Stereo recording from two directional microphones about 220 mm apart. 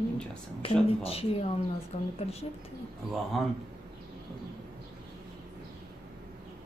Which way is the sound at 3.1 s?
Centre (ahead or behind).